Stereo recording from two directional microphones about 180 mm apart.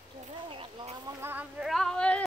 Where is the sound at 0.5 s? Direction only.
30° right (ahead or behind).